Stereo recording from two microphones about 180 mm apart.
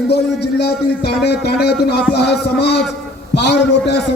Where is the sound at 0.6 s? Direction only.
65° left (ahead or behind).